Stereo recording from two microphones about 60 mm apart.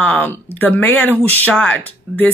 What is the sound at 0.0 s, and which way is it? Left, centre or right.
Speech, left.